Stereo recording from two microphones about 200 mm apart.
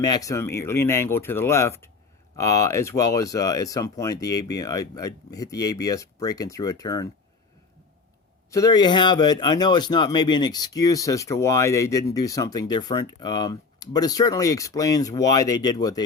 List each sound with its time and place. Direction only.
0.0 s speech: 20° left (ahead or behind)
8.4 s a man's voice: 15° left (ahead or behind)